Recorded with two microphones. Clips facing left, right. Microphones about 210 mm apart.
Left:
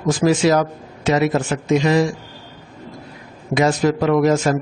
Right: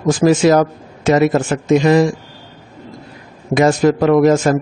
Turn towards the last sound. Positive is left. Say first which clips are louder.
# right 4 dB
turn(degrees=-50)  # may be behind; listen again after turning